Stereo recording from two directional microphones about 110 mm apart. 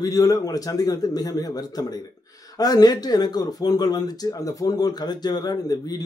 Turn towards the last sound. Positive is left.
turn(degrees=35)  # may be behind; listen again after turning